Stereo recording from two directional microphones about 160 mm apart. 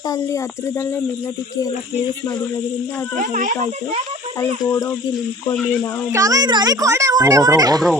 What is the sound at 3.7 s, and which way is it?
Speech, 40° right (ahead or behind).